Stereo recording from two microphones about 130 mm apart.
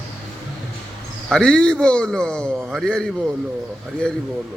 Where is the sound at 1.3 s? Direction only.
5° left (ahead or behind).